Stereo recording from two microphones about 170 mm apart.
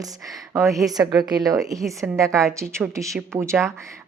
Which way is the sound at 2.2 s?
15° right (ahead or behind).